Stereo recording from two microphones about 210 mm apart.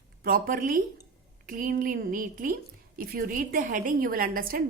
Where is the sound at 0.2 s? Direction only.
40° right (ahead or behind).